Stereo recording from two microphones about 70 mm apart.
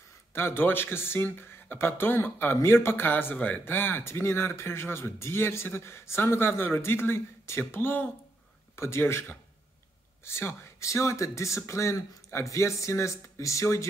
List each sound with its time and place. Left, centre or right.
0.3 s speech: left
10.2 s speech: left